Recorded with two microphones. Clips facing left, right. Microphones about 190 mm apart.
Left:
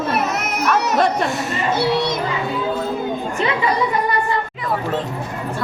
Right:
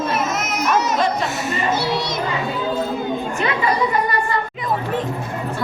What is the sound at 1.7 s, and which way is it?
Speech, 55° left (ahead or behind).